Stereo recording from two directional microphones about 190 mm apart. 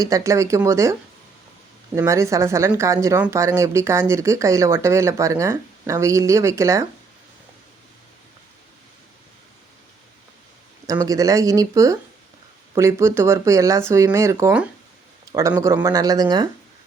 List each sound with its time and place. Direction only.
0.0 s speech: 15° right (ahead or behind)
2.0 s speech: 15° right (ahead or behind)
10.8 s speech: 20° right (ahead or behind)